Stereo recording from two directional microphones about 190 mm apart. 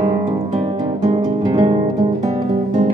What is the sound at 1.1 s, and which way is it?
Music, 20° right (ahead or behind).